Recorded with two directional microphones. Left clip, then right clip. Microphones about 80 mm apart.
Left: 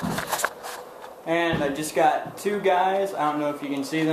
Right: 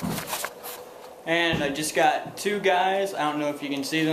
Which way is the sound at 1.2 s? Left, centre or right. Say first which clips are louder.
Even; centre.